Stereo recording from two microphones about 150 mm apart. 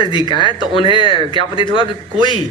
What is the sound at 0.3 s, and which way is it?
Speech, 30° left (ahead or behind).